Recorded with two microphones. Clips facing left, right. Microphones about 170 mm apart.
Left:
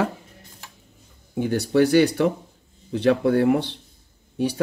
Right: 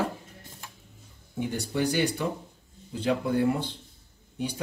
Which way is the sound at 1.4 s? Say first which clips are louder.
Left 9 dB; 75° left (ahead or behind).